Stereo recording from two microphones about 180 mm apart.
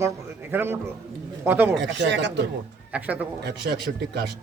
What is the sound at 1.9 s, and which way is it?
Speech, 80° right.